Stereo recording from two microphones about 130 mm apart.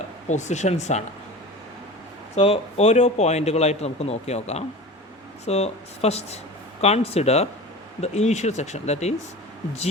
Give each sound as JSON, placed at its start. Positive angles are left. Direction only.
{"t": 0.3, "sound": "a man's voice", "side_deg": 65}
{"t": 2.3, "sound": "a man's voice", "side_deg": 50}